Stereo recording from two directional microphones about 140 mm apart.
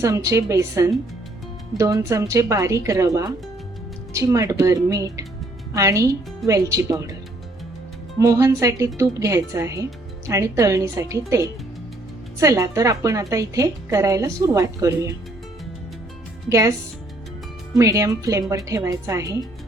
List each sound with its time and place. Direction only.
0.0 s a woman's voice: 20° right (ahead or behind)
8.2 s a woman's voice: 25° right (ahead or behind)
16.5 s a woman's voice: 20° right (ahead or behind)
17.7 s a woman's voice: 25° right (ahead or behind)